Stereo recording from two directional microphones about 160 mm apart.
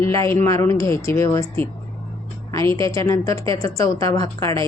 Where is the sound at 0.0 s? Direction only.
15° left (ahead or behind).